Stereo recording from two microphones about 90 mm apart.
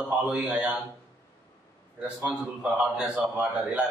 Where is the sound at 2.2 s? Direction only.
15° right (ahead or behind).